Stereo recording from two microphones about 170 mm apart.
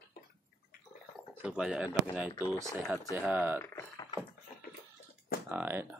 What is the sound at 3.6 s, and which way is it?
Speech, 20° left (ahead or behind).